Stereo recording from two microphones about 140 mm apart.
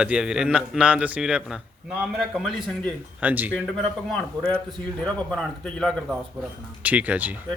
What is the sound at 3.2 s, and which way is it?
Speech, 10° right (ahead or behind).